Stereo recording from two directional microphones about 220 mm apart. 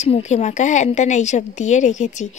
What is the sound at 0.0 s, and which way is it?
A woman's voice, 30° left (ahead or behind).